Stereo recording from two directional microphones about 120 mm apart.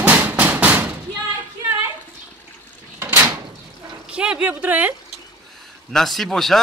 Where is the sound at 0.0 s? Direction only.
15° right (ahead or behind).